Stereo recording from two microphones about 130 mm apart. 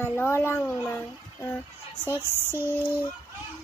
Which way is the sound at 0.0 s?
20° left (ahead or behind).